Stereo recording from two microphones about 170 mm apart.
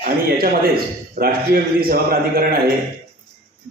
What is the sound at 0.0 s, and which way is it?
A man's voice, 60° right (ahead or behind).